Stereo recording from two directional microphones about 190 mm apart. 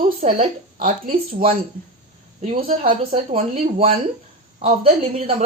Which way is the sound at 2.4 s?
40° right (ahead or behind).